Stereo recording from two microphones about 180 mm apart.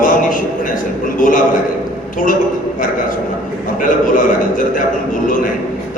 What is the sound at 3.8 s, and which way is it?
A man's voice, 45° left (ahead or behind).